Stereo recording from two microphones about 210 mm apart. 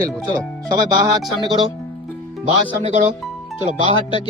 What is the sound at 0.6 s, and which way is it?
Speech, 20° right (ahead or behind).